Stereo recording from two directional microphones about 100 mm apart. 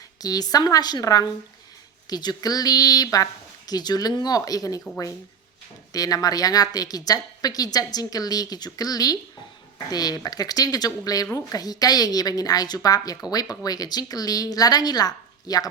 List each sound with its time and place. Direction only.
0.2 s a woman's voice: 40° left (ahead or behind)
5.9 s a woman's voice: 35° left (ahead or behind)